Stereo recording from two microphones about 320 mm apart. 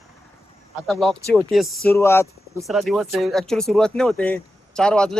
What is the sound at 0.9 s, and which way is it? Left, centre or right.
Speech, centre.